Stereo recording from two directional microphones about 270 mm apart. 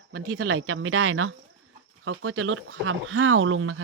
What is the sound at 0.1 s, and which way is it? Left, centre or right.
Speech, right.